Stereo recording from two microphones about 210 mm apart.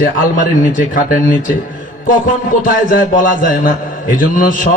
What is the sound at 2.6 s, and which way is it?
A man's voice, 40° left (ahead or behind).